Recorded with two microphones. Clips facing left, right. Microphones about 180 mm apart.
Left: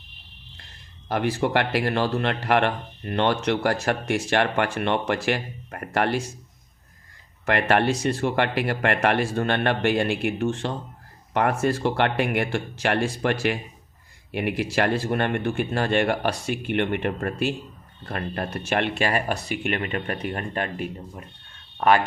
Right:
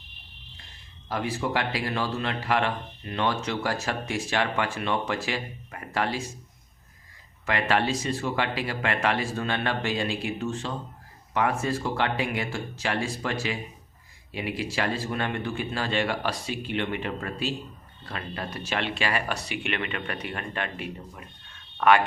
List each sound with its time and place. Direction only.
1.0 s speech: 65° left (ahead or behind)
7.4 s speech: 60° left (ahead or behind); by 22.0 s 35° left (ahead or behind)